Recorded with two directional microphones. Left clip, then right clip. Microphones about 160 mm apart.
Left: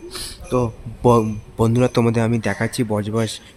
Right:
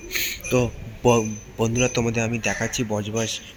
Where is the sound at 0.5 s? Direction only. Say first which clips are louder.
Left 3 dB; 25° left (ahead or behind).